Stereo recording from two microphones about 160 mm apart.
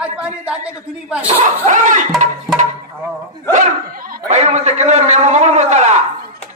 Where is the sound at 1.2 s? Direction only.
45° right (ahead or behind).